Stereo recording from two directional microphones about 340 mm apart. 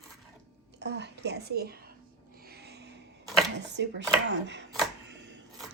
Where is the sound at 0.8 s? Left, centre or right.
Right.